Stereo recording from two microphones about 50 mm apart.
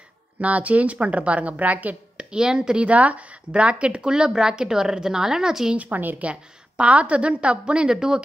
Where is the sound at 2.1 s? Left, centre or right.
Centre.